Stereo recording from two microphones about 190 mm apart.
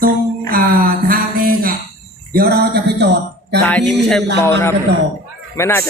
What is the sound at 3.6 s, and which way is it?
A man's voice, 5° left (ahead or behind).